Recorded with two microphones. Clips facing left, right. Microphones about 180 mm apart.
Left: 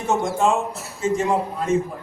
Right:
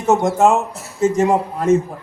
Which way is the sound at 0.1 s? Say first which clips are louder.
Right 5 dB; 70° right (ahead or behind).